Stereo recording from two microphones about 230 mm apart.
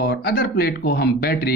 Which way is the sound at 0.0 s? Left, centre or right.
Left.